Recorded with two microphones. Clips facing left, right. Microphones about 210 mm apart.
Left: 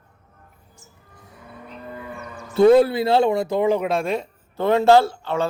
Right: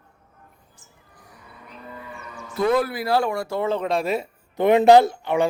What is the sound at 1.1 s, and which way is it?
Livestock, 25° left (ahead or behind).